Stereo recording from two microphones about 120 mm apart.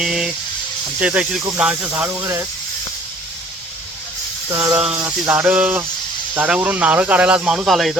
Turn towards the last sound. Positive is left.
turn(degrees=0)  # may be behind; listen again after turning